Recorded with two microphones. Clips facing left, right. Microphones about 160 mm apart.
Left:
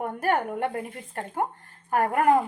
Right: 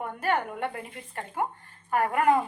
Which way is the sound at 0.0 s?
50° left (ahead or behind).